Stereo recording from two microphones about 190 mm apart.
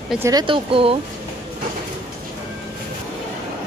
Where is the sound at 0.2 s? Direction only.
20° right (ahead or behind).